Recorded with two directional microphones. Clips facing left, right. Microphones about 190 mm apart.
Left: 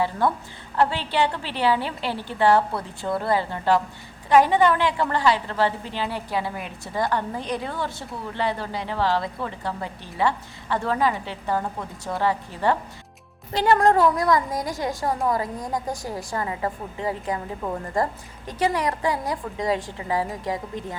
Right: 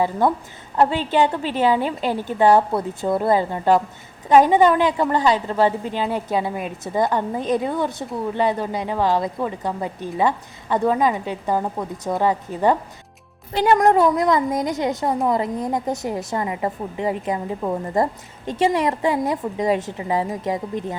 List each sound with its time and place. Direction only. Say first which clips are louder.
0.8 s a woman's voice: right 4 dB; 20° right (ahead or behind)